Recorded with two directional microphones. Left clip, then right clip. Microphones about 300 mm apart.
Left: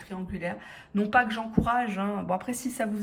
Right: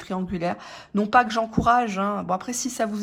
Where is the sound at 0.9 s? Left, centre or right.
Centre.